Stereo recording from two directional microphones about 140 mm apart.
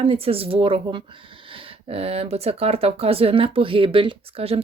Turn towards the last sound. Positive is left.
turn(degrees=-45)  # may be behind; listen again after turning